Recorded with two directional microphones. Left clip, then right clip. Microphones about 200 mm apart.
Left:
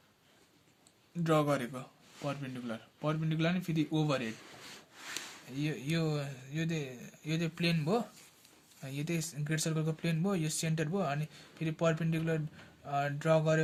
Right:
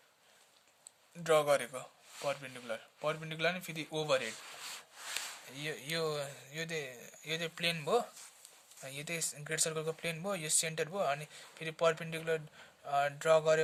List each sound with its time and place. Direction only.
1.2 s speech: 25° right (ahead or behind)
4.4 s rub: 50° right (ahead or behind)
5.5 s speech: 25° right (ahead or behind)